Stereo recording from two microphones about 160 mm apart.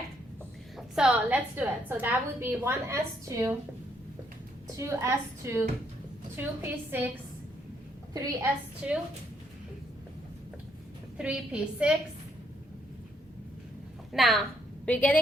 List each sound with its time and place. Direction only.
0.8 s a woman's voice: 5° right (ahead or behind)
4.8 s a woman's voice: 15° right (ahead or behind)
8.1 s a woman's voice: 20° right (ahead or behind)
8.8 s a woman's voice: 5° right (ahead or behind)
11.2 s a woman's voice: 5° right (ahead or behind)
14.1 s a woman's voice: centre (ahead or behind)